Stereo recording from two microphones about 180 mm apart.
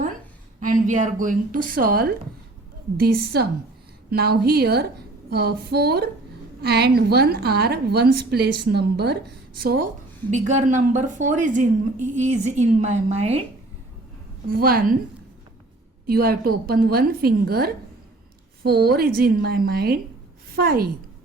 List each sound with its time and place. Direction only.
0.6 s a woman's voice: 45° right (ahead or behind)
10.3 s a woman's voice: 40° right (ahead or behind)
14.4 s speech: 55° right (ahead or behind)
16.0 s a woman's voice: 55° right (ahead or behind)